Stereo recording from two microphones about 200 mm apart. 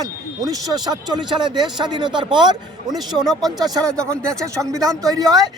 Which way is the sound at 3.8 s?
15° right (ahead or behind).